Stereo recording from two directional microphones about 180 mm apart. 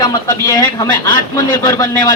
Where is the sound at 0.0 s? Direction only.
20° left (ahead or behind).